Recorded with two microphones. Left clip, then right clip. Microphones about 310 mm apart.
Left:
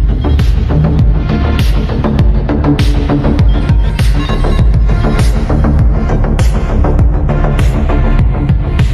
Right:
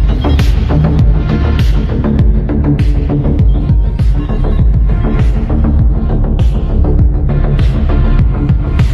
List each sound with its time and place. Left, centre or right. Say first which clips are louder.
0.2 s music: right 2 dB; centre; by 3.7 s left
4.3 s music: left 4 dB; left
6.8 s music: left 1 dB; left; by 8.8 s centre